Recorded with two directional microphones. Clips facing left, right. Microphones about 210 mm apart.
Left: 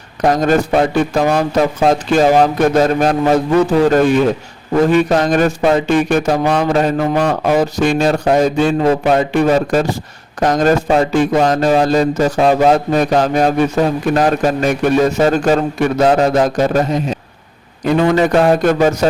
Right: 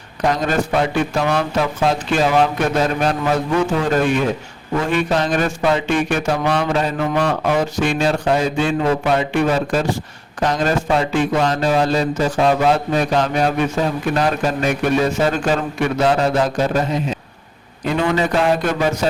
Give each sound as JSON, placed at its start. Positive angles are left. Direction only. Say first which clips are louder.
{"t": 0.2, "sound": "speech", "louder": "left 5 dB", "side_deg": 45}
{"t": 0.9, "sound": "a sound", "louder": "left 4 dB", "side_deg": 40}
{"t": 17.9, "sound": "speech", "louder": "left 6 dB", "side_deg": 45}